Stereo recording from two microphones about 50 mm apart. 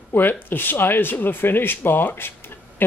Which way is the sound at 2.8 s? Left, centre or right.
Left.